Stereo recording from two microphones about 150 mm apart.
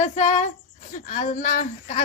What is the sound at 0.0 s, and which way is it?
A woman's voice, 55° left (ahead or behind).